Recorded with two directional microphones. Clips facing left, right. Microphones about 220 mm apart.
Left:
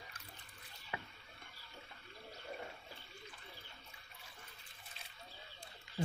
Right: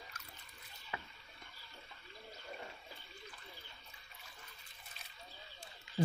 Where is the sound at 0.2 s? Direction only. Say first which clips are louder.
Right 1 dB; 30° left (ahead or behind).